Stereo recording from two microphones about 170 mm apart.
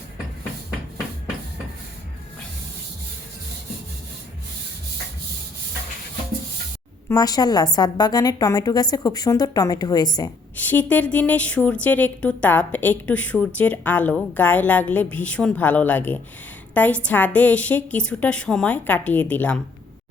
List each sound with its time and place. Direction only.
7.1 s a woman's voice: 20° left (ahead or behind)
10.7 s a woman's voice: 10° left (ahead or behind)